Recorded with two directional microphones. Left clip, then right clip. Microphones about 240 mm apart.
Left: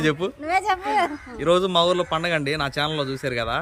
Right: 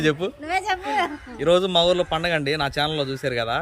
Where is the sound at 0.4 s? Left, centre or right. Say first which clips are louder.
Left 3 dB; centre.